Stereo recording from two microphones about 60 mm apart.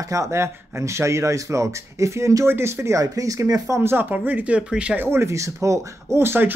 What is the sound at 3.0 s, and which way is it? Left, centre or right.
Speech, right.